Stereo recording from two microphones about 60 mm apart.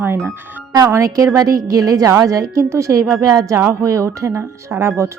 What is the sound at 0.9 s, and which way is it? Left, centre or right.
Speech, right.